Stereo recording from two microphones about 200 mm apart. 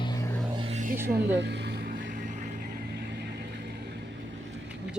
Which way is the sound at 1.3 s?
60° right (ahead or behind).